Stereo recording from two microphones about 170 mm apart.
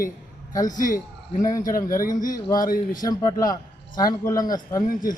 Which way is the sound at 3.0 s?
20° left (ahead or behind).